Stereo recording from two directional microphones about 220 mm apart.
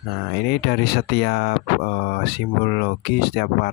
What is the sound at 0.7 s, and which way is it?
Speech, 45° left (ahead or behind).